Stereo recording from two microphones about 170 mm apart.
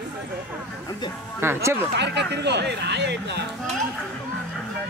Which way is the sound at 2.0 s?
85° right.